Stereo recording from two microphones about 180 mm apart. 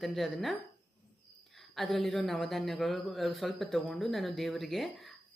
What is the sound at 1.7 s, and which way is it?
Speech, centre (ahead or behind).